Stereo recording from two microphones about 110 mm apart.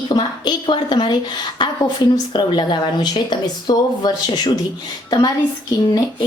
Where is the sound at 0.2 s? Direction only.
45° left (ahead or behind).